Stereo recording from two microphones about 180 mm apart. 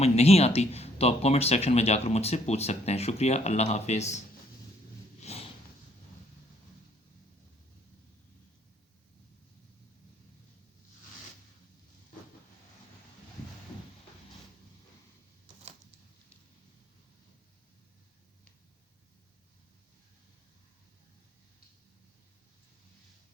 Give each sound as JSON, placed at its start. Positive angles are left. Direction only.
{"t": 0.0, "sound": "speech", "side_deg": 35}
{"t": 5.2, "sound": "sniff", "side_deg": 35}